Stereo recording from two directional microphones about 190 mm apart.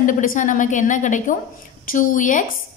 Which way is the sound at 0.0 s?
45° left (ahead or behind).